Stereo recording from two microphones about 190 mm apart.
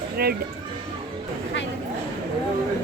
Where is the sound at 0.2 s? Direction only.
55° right (ahead or behind).